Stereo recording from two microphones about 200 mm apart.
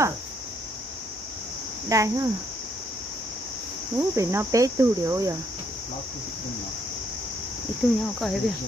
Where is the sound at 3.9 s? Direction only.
15° right (ahead or behind).